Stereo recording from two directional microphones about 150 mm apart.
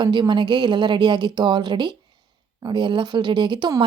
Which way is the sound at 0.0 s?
30° right (ahead or behind).